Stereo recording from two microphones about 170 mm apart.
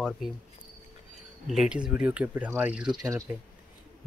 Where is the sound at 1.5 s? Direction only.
5° right (ahead or behind).